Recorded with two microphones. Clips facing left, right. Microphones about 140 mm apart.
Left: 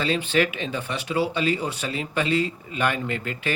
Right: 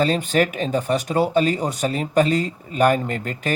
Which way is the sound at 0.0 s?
45° right (ahead or behind).